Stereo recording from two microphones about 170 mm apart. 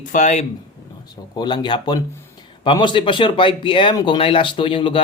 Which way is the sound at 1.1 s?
25° left (ahead or behind).